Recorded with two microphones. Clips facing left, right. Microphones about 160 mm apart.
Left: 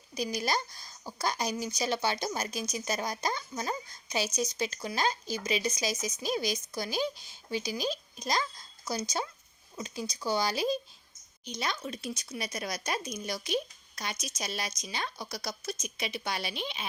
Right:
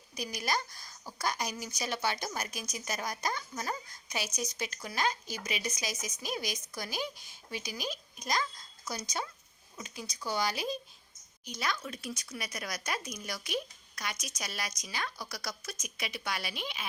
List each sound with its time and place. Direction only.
0.1 s speech: 30° left (ahead or behind)